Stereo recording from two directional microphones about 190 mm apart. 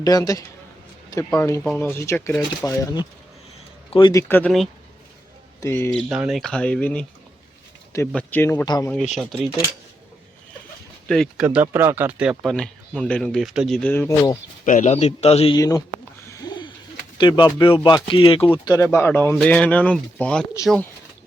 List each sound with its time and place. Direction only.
0.0 s a man's voice: 20° left (ahead or behind)
5.9 s speech: centre (ahead or behind)
8.1 s speech: 10° left (ahead or behind)
8.6 s a man's voice: 20° left (ahead or behind)
9.1 s speech: centre (ahead or behind)
11.1 s speech: centre (ahead or behind)
14.6 s speech: 40° left (ahead or behind)
15.5 s a man's voice: 20° left (ahead or behind)
16.3 s a sound: 20° left (ahead or behind)
17.2 s speech: 25° left (ahead or behind); by 20.6 s 5° left (ahead or behind)